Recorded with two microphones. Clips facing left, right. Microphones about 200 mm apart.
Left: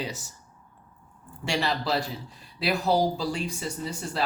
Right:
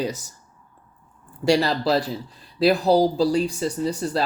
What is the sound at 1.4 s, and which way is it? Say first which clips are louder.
Speech: right 8 dB; 40° right (ahead or behind).